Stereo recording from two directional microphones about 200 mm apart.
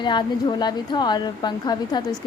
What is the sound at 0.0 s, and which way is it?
A woman's voice, 20° left (ahead or behind).